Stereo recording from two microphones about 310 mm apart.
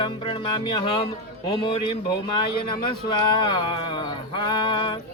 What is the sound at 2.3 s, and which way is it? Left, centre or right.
Speech, centre.